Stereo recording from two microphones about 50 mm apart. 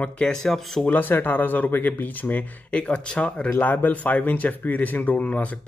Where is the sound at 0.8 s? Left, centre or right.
Left.